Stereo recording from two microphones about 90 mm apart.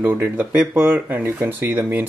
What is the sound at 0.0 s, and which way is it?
Speech, 20° right (ahead or behind).